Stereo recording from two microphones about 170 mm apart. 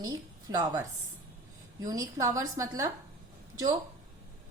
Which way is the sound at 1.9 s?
20° right (ahead or behind).